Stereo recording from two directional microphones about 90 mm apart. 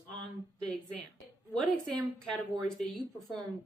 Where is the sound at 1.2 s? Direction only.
5° left (ahead or behind).